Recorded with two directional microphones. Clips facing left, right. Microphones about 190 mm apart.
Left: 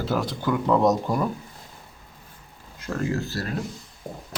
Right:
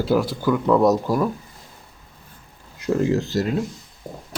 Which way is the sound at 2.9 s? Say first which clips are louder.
Right 7 dB; 20° right (ahead or behind).